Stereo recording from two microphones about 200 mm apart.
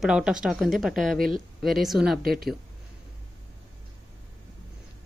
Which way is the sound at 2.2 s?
50° right (ahead or behind).